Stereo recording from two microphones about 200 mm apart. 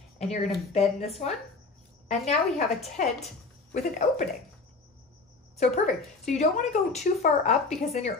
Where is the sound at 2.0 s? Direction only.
30° left (ahead or behind).